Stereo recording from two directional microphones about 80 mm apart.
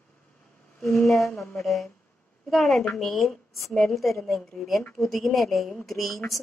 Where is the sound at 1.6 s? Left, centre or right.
Centre.